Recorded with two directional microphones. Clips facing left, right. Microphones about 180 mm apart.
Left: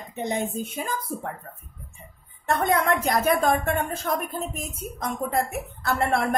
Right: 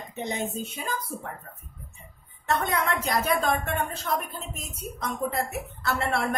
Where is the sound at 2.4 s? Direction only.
50° left (ahead or behind).